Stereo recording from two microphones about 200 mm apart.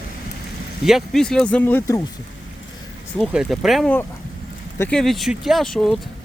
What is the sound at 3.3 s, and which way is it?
Speech, centre (ahead or behind).